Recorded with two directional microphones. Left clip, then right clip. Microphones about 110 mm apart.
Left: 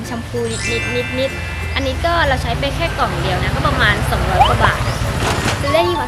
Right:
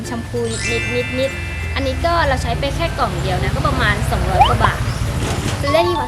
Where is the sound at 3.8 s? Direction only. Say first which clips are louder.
Left 4 dB; 10° right (ahead or behind).